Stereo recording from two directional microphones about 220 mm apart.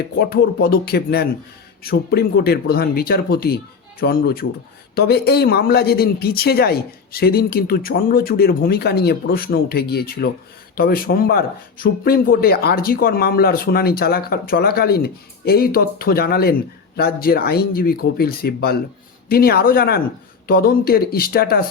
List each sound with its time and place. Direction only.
0.2 s speech: 45° left (ahead or behind)